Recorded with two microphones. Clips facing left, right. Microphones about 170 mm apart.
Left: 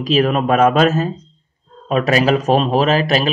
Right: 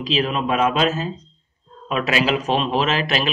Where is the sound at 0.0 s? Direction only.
50° left (ahead or behind).